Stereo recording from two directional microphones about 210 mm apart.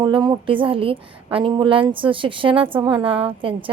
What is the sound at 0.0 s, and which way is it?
A woman's voice, 20° right (ahead or behind).